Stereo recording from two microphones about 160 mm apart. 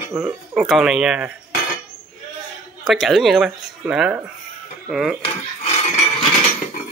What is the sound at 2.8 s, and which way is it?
Speech, centre (ahead or behind).